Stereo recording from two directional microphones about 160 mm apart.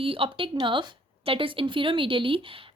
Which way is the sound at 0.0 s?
35° right (ahead or behind).